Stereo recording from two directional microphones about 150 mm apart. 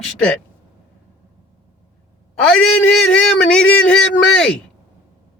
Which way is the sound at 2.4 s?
5° left (ahead or behind).